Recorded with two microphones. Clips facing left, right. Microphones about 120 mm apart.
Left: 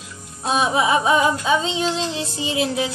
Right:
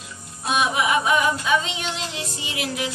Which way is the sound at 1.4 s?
30° left (ahead or behind).